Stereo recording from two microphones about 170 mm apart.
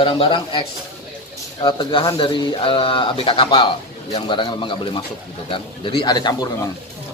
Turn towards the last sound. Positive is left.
turn(degrees=25)  # may be behind; listen again after turning